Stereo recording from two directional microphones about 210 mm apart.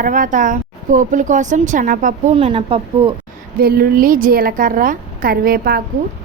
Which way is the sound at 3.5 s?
45° right (ahead or behind).